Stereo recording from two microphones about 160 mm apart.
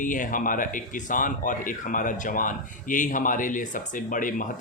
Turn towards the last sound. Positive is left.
turn(degrees=55)  # may be behind; listen again after turning